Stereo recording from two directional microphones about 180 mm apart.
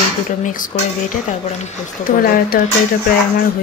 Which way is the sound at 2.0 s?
55° left (ahead or behind).